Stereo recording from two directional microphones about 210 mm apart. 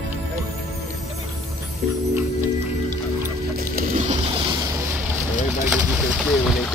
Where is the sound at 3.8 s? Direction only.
35° right (ahead or behind).